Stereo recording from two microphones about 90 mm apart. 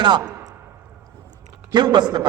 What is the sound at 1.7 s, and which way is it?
Speech, 55° right (ahead or behind).